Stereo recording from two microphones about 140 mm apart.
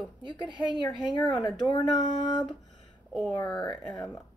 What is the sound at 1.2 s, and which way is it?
Speech, 35° left (ahead or behind).